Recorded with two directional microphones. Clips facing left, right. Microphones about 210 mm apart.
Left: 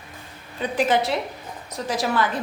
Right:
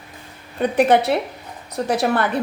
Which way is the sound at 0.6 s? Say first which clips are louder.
Right 6 dB; 60° right (ahead or behind).